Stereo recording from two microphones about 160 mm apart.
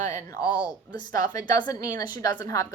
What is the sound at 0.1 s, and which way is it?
Speech, 20° left (ahead or behind).